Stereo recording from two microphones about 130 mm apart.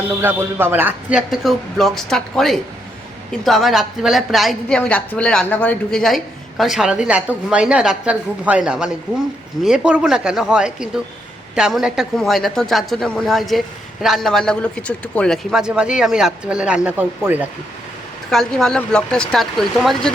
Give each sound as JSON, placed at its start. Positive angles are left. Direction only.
{"t": 0.2, "sound": "speech", "side_deg": -15}
{"t": 1.3, "sound": "a woman's voice", "side_deg": 0}
{"t": 18.3, "sound": "a woman's voice", "side_deg": 5}